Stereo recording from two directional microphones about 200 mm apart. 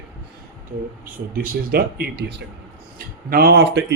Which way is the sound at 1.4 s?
50° right (ahead or behind).